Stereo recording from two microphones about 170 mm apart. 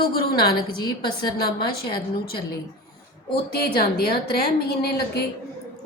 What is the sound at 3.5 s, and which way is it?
A woman's voice, 65° left (ahead or behind).